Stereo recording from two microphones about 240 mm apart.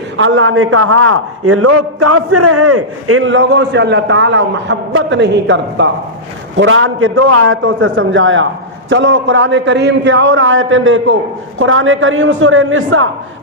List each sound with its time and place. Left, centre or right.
0.2 s a man's voice: right